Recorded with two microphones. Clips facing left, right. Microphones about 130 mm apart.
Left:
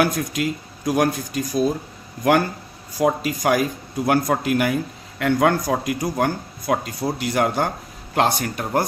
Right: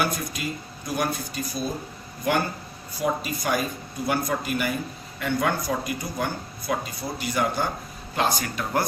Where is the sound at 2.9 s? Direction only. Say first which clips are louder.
Left 6 dB; 90° left; by 8.4 s 70° left (ahead or behind).